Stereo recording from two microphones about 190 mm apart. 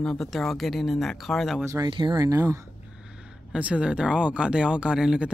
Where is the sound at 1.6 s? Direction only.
15° right (ahead or behind).